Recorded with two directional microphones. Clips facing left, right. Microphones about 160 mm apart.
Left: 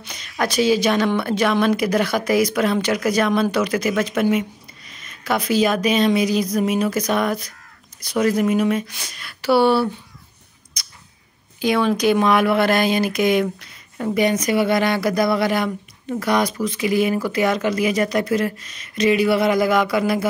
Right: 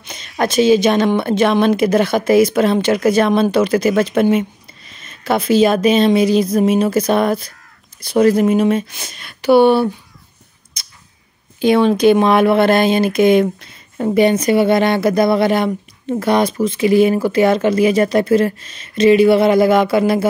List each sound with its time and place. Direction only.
0.0 s a sound: 25° right (ahead or behind)
0.4 s speech: 25° right (ahead or behind)
10.8 s crow: 25° right (ahead or behind)
11.6 s speech: 25° right (ahead or behind)